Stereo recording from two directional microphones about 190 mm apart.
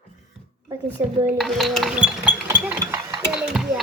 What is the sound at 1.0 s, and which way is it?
Speech, 10° right (ahead or behind).